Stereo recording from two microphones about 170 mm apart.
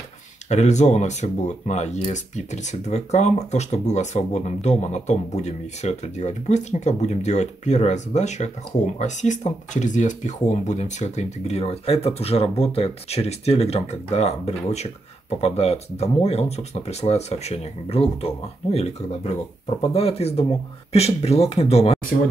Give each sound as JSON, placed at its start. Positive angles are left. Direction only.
{"t": 0.5, "sound": "speech", "side_deg": 40}